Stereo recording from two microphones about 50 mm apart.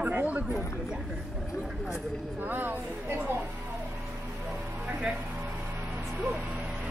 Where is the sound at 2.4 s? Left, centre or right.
Right.